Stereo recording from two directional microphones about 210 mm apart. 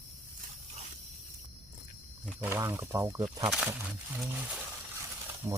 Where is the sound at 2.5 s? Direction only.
15° right (ahead or behind).